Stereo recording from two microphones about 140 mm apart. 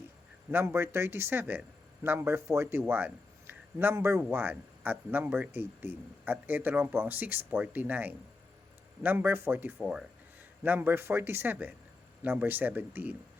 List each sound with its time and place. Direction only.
0.5 s a man's voice: 15° right (ahead or behind)
9.7 s speech: 5° left (ahead or behind)
10.6 s a man's voice: 15° right (ahead or behind)